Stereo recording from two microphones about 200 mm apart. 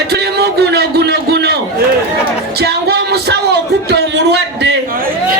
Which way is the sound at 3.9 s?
55° right (ahead or behind).